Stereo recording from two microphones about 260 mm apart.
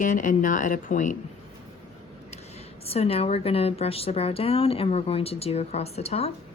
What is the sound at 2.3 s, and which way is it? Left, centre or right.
Speech, left.